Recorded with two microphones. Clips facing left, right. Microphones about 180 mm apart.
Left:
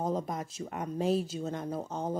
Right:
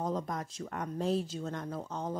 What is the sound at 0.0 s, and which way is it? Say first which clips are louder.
Speech: left 2 dB; 25° left (ahead or behind).